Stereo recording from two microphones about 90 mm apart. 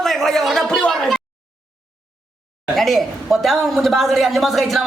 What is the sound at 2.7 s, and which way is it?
A woman's voice, centre (ahead or behind).